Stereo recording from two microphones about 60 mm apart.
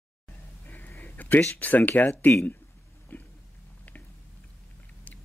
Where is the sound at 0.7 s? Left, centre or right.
Left.